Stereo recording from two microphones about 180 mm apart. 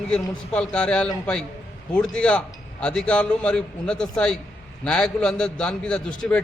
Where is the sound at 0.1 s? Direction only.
5° left (ahead or behind).